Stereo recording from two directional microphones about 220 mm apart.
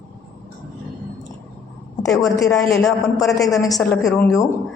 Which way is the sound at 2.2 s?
15° left (ahead or behind).